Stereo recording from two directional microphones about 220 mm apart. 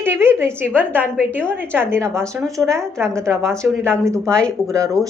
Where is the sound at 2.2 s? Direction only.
Centre (ahead or behind).